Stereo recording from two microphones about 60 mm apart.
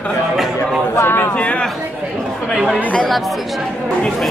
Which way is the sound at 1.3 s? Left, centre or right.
Left.